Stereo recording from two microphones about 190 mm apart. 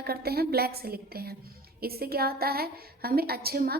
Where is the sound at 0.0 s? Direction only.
55° right (ahead or behind).